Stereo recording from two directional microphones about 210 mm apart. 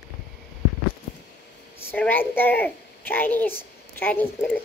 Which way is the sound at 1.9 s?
10° left (ahead or behind).